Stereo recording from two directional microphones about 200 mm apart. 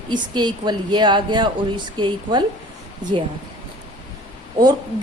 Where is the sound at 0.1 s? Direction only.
20° right (ahead or behind).